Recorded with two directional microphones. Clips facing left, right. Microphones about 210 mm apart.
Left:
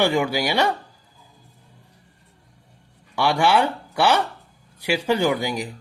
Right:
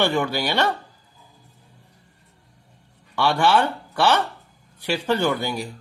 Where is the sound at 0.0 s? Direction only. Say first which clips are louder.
Left 1 dB; 10° left (ahead or behind).